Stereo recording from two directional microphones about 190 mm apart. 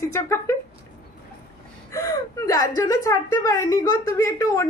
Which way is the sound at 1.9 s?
15° left (ahead or behind).